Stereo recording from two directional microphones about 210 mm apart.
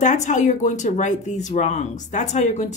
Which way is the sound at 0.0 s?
35° left (ahead or behind).